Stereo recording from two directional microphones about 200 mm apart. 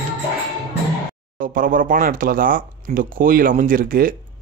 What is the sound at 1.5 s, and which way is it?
Speech, 45° right (ahead or behind).